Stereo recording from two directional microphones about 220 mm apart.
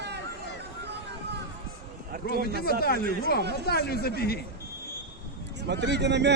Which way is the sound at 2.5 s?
45° left (ahead or behind).